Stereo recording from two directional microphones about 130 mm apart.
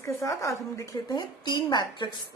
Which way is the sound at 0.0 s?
25° left (ahead or behind).